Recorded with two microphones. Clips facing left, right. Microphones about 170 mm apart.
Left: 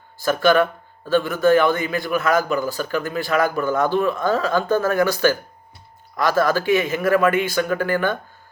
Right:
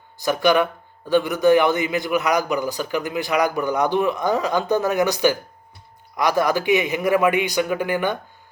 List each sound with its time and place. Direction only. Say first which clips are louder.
0.2 s a man's voice: left 1 dB; 15° right (ahead or behind)